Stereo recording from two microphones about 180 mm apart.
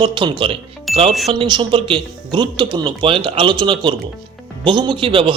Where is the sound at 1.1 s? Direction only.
Centre (ahead or behind).